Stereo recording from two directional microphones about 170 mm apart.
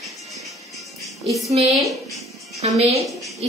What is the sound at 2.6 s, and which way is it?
Speech, 40° right (ahead or behind).